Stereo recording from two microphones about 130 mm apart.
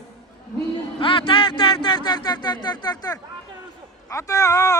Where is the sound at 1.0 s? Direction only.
40° left (ahead or behind).